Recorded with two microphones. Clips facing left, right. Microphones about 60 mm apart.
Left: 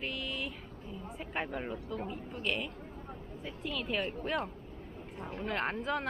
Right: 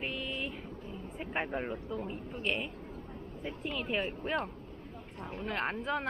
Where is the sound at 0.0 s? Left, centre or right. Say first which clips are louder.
Right 1 dB; centre.